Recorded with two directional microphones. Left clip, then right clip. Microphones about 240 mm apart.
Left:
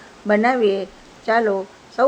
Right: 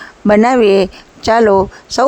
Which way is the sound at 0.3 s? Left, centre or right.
Right.